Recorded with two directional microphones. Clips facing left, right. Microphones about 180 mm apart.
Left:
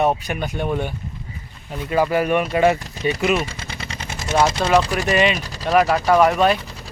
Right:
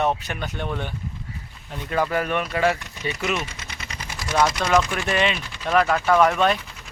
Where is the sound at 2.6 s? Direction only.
25° left (ahead or behind).